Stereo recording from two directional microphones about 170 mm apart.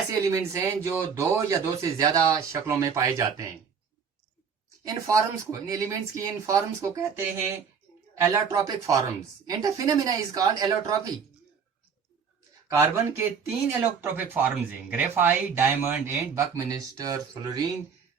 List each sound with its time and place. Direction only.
0.3 s speech: 15° right (ahead or behind)
4.9 s speech: 20° right (ahead or behind)
12.7 s speech: 15° right (ahead or behind)